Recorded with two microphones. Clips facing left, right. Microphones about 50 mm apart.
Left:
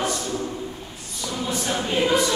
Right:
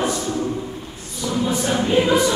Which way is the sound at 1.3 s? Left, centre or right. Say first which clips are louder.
Right 5 dB; centre.